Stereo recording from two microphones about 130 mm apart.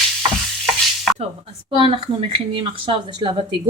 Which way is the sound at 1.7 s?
40° right (ahead or behind).